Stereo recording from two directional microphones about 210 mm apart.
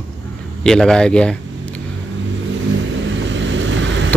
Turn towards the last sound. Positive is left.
turn(degrees=-60)  # may be behind; listen again after turning